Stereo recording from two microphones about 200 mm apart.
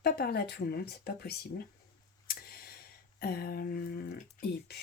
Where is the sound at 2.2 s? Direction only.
50° left (ahead or behind).